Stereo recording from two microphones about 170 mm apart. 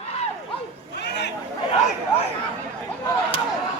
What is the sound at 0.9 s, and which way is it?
Chatter, 85° left.